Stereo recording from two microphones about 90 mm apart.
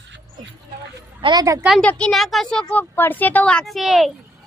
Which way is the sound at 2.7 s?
20° left (ahead or behind).